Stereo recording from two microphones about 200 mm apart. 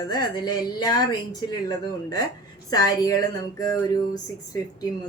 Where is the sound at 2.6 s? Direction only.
20° left (ahead or behind).